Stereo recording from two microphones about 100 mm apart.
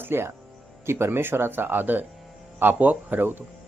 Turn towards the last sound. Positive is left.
turn(degrees=-20)  # may be behind; listen again after turning